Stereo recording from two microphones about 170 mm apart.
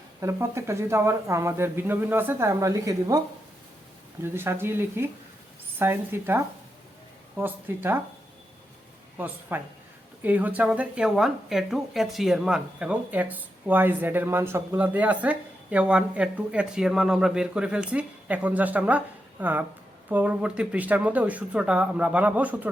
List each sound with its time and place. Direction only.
0.2 s a woman's voice: 15° right (ahead or behind)
4.2 s a woman's voice: 15° right (ahead or behind)
9.1 s a woman's voice: 10° right (ahead or behind)